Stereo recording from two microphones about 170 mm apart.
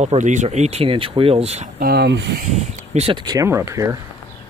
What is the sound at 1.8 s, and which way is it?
Speech, 70° right (ahead or behind).